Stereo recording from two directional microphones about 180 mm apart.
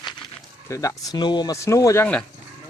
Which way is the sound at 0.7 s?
15° left (ahead or behind).